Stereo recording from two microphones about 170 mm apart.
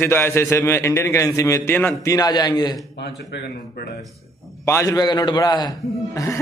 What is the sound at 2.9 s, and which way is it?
Speech, 85° left.